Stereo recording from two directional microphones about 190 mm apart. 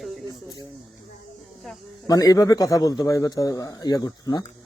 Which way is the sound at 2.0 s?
20° left (ahead or behind).